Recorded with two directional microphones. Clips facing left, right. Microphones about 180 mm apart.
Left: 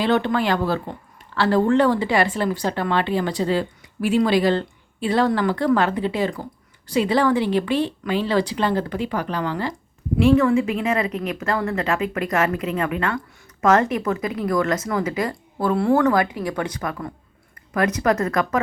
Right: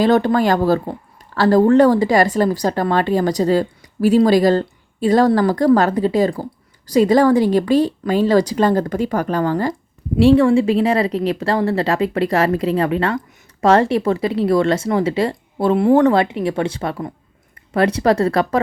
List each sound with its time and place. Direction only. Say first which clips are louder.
0.0 s speech: right 6 dB; 40° right (ahead or behind)
10.2 s speech: right 4 dB; 30° right (ahead or behind)